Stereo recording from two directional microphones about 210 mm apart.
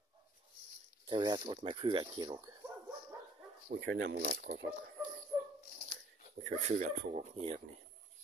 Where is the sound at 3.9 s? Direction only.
60° right (ahead or behind).